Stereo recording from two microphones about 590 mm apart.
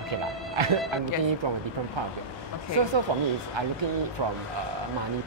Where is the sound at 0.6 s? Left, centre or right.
Right.